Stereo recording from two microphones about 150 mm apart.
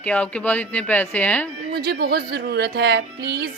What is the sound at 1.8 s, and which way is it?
Speech, 90° right.